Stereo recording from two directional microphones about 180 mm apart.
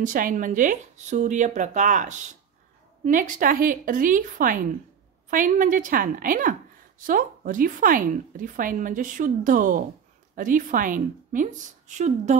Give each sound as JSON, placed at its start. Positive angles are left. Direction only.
{"t": 0.0, "sound": "a woman's voice", "side_deg": -50}